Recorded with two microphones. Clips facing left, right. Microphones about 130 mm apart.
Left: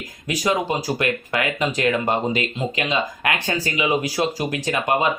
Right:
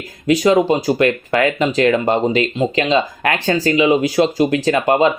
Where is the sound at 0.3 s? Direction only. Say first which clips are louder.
Right 9 dB; 25° right (ahead or behind).